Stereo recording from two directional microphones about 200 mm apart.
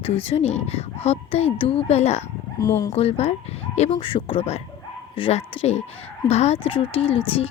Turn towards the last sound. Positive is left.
turn(degrees=25)  # may be behind; listen again after turning